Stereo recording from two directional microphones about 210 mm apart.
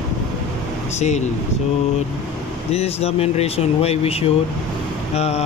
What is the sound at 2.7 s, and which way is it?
Speech, 30° left (ahead or behind).